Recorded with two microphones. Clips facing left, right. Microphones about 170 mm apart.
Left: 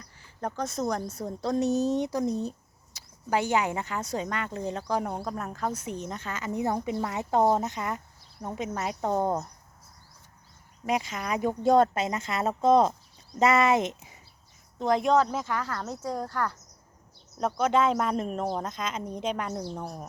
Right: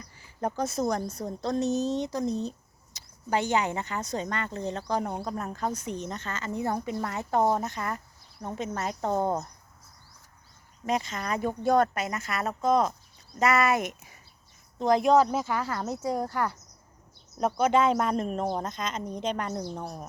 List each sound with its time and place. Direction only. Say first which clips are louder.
0.0 s a woman's voice: right 3 dB; 10° right (ahead or behind); by 9.5 s 10° left (ahead or behind)
10.8 s speech: even; 10° left (ahead or behind)
14.8 s speech: right 2 dB; centre (ahead or behind)